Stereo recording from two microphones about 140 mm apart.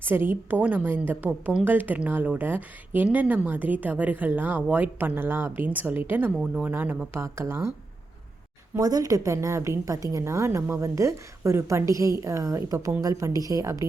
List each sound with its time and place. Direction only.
0.0 s a woman's voice: 15° right (ahead or behind)
8.7 s a woman's voice: 25° right (ahead or behind)